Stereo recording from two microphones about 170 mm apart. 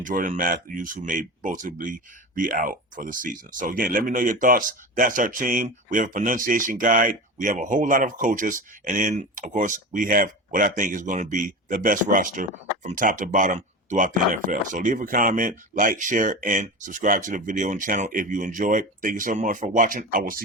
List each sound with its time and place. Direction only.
0.0 s speech: 50° right (ahead or behind)